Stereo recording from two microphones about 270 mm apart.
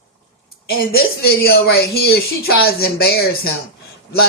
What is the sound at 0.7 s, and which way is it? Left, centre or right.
A woman's voice, left.